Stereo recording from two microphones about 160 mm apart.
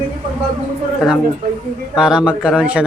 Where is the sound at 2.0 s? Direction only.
5° right (ahead or behind).